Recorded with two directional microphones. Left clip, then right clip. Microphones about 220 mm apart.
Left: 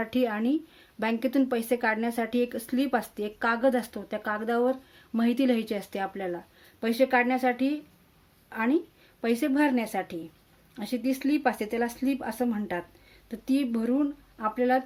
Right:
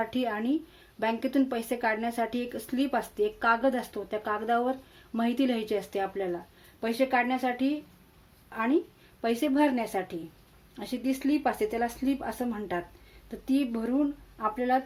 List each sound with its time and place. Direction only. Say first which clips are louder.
0.0 s speech: left 2 dB; 35° left (ahead or behind)